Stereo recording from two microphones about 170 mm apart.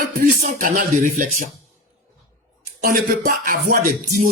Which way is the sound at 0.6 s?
50° right (ahead or behind).